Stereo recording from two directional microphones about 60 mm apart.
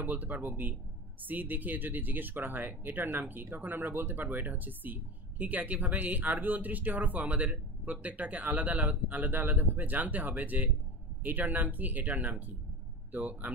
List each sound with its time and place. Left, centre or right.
0.0 s speech: right